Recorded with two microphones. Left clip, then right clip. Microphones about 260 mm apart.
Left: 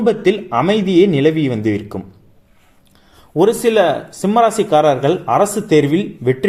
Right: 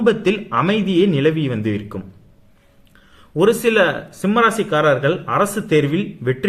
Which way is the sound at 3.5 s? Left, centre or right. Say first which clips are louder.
Left 2 dB; centre.